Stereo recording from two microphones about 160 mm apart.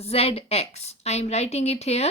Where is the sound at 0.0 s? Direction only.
40° left (ahead or behind).